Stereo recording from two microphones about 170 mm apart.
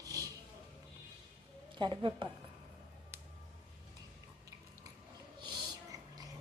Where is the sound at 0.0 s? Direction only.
20° right (ahead or behind).